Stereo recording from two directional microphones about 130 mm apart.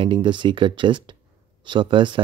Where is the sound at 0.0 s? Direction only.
40° right (ahead or behind).